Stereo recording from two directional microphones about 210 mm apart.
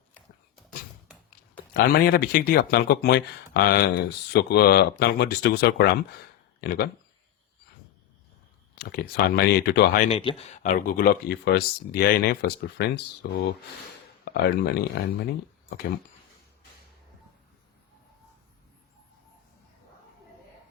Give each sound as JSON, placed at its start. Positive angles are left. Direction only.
{"t": 1.7, "sound": "speech", "side_deg": 45}
{"t": 8.7, "sound": "speech", "side_deg": 50}
{"t": 10.1, "sound": "speech", "side_deg": 25}
{"t": 14.3, "sound": "speech", "side_deg": 50}